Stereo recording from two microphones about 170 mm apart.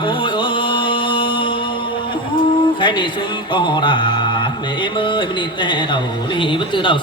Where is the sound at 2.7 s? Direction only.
30° left (ahead or behind).